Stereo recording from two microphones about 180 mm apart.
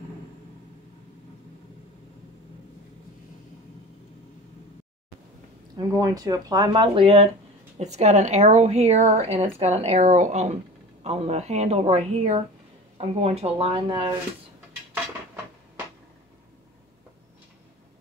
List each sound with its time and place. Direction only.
5.8 s speech: 20° right (ahead or behind)